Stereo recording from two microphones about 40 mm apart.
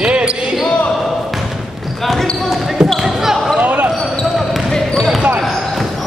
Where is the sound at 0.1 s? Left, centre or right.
Right.